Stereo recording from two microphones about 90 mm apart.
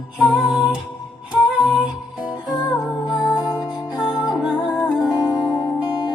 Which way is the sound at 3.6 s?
50° left (ahead or behind).